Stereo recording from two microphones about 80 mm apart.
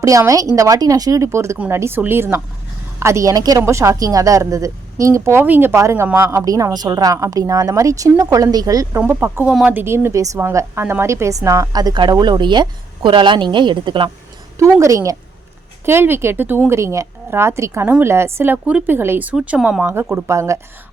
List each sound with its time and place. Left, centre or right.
0.0 s a woman's voice: right
3.6 s a woman's voice: right
6.4 s a woman's voice: right
9.0 s a woman's voice: right
9.5 s speech: centre
9.7 s a woman's voice: right
11.7 s speech: right
12.2 s a woman's voice: right
14.6 s a woman's voice: right
15.9 s a woman's voice: right
19.4 s speech: centre
19.9 s a woman's voice: right